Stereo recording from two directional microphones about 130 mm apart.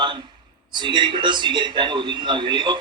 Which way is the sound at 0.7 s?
35° right (ahead or behind).